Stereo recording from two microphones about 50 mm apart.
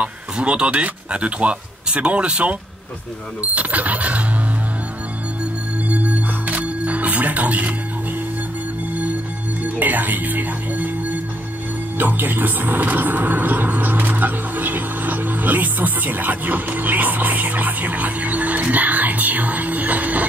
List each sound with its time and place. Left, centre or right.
0.0 s speech: right
3.5 s a sound: right
5.9 s music: right
9.6 s music: right
12.0 s speech: right